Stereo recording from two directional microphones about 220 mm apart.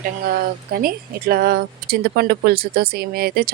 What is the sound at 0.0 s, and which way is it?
Speech, 40° right (ahead or behind).